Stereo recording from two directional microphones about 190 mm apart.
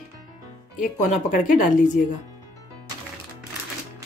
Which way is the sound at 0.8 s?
45° left (ahead or behind).